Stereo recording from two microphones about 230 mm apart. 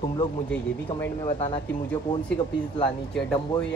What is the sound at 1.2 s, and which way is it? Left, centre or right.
Speech, left.